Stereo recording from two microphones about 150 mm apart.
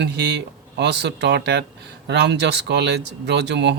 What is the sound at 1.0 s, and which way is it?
Speech, 90° right.